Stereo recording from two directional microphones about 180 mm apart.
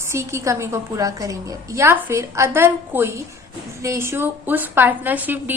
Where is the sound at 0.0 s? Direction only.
15° right (ahead or behind).